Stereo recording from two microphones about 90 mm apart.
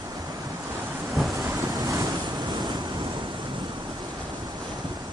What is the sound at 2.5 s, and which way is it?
Waves, 50° right (ahead or behind).